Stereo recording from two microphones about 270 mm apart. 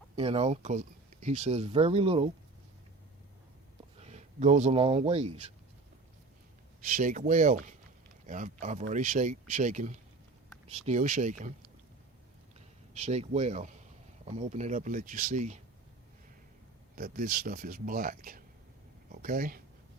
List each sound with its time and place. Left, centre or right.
0.2 s speech: right
4.0 s speech: right
6.8 s speech: right
12.5 s speech: right
16.9 s speech: right